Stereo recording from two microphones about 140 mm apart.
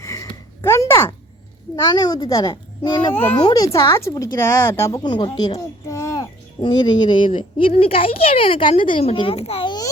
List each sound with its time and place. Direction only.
0.0 s a sound: 20° left (ahead or behind)
1.7 s a child's voice: 25° left (ahead or behind)
3.1 s a child's voice: 15° left (ahead or behind)
3.4 s speech: 25° left (ahead or behind)
5.5 s a sound: 20° left (ahead or behind)
6.6 s speech: 30° left (ahead or behind)